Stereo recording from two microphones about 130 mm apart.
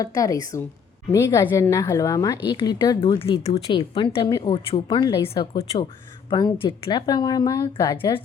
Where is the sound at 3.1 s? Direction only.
45° left (ahead or behind).